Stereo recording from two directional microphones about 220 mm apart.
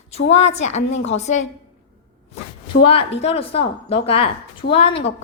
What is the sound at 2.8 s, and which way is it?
A woman's voice, 25° left (ahead or behind).